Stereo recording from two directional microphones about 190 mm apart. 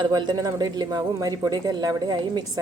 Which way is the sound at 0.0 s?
25° right (ahead or behind).